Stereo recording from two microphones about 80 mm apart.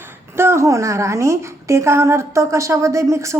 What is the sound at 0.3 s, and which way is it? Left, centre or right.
A woman's voice, right.